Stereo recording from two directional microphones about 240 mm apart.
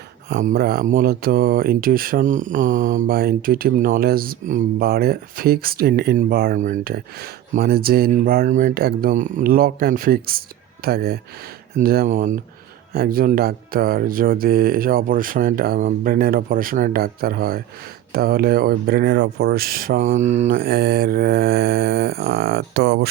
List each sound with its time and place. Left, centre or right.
0.3 s speech: right